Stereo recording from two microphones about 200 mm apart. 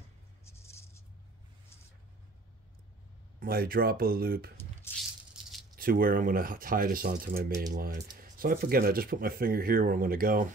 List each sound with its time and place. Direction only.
0.5 s music: 15° left (ahead or behind)
3.3 s speech: 50° right (ahead or behind)
4.6 s squish: 10° left (ahead or behind)
5.3 s rattle: centre (ahead or behind)
5.8 s speech: 45° right (ahead or behind)